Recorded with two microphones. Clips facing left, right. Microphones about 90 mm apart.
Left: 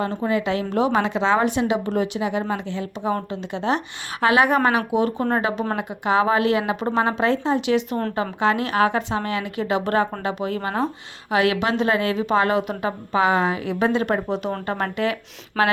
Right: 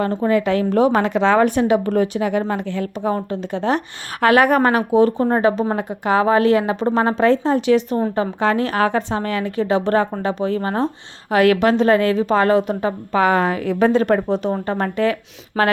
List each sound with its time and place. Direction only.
0.0 s a woman's voice: 45° right (ahead or behind)
11.3 s a woman's voice: 45° right (ahead or behind)